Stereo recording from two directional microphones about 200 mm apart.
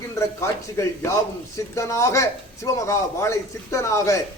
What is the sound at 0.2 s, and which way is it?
A man's voice, 15° left (ahead or behind).